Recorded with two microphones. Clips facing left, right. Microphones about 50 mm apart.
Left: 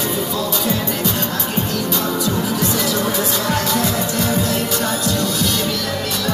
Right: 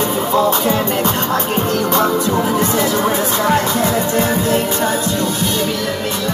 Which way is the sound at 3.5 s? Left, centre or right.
Right.